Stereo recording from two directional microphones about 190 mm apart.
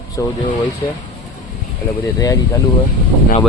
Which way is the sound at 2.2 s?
15° left (ahead or behind).